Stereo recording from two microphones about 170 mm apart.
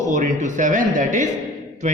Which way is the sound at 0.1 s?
45° right (ahead or behind).